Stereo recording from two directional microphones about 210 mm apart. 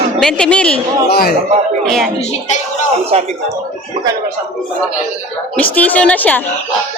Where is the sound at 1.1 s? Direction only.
50° left (ahead or behind).